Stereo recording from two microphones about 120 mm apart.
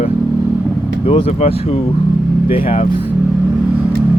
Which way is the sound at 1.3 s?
60° left (ahead or behind).